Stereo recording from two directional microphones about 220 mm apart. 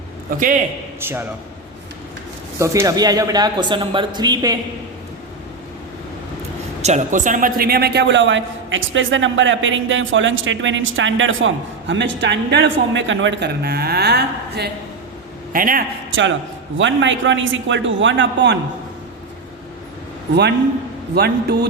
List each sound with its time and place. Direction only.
0.3 s a man's voice: 40° right (ahead or behind)
0.9 s speech: 10° right (ahead or behind)
2.6 s speech: 15° right (ahead or behind)
6.8 s a man's voice: 35° right (ahead or behind)
16.7 s a man's voice: 55° right (ahead or behind)
21.2 s speech: 45° right (ahead or behind)